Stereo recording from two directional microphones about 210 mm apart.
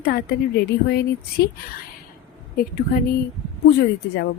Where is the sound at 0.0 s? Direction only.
50° left (ahead or behind).